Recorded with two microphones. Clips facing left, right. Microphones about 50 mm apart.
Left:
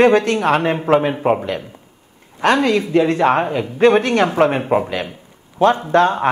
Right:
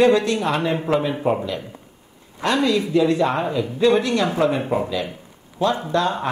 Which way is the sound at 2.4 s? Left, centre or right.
Left.